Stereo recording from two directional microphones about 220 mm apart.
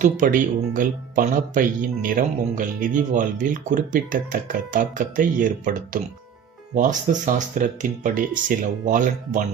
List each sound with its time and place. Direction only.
0.0 s speech: 35° right (ahead or behind)